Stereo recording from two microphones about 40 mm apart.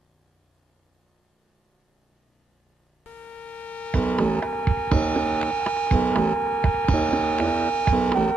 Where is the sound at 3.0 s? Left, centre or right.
Left.